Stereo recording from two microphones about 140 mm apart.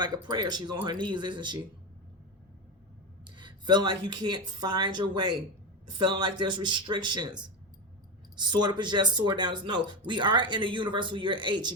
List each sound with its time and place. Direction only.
0.0 s speech: 30° right (ahead or behind)
3.3 s speech: 35° right (ahead or behind)
8.4 s speech: 30° right (ahead or behind)